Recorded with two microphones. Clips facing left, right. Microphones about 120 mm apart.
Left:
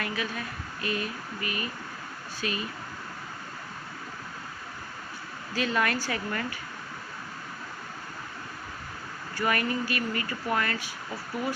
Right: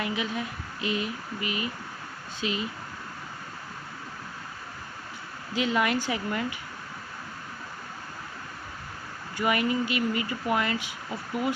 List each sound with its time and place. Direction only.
0.0 s speech: 20° right (ahead or behind)
5.5 s speech: 15° right (ahead or behind)
9.3 s speech: 15° right (ahead or behind)